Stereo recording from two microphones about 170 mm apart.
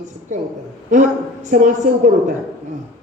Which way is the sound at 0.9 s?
45° right (ahead or behind).